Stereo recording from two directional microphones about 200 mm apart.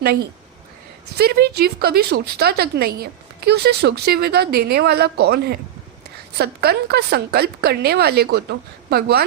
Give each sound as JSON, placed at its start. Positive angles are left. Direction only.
{"t": 0.0, "sound": "speech", "side_deg": -50}